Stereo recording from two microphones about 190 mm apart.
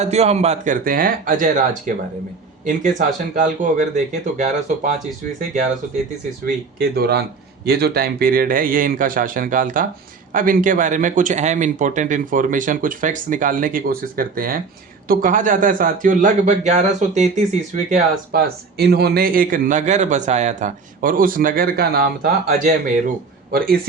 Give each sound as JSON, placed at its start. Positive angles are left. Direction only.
{"t": 0.0, "sound": "speech", "side_deg": -35}
{"t": 2.6, "sound": "speech", "side_deg": -40}
{"t": 6.4, "sound": "speech", "side_deg": -55}
{"t": 18.3, "sound": "speech", "side_deg": -55}
{"t": 23.5, "sound": "speech", "side_deg": -50}